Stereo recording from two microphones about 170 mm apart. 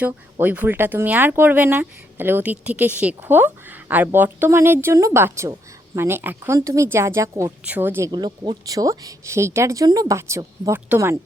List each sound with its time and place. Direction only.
0.0 s speech: 10° right (ahead or behind)
8.1 s speech: 25° right (ahead or behind)